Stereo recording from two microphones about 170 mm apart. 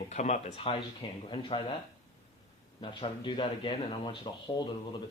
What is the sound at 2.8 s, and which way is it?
Speech, 30° left (ahead or behind).